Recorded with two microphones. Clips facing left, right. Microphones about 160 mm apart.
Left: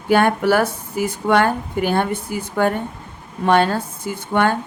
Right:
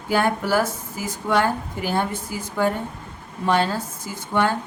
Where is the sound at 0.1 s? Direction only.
65° left (ahead or behind).